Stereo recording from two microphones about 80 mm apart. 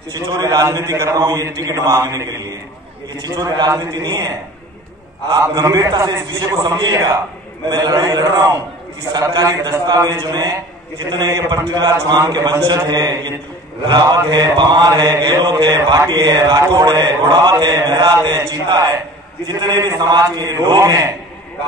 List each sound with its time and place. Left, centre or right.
0.1 s a man's voice: right
5.3 s mantra: right
9.3 s a man's voice: right
10.2 s mantra: right